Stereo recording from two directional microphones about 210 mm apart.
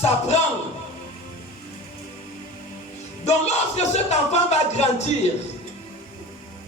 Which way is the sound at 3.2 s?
30° left (ahead or behind).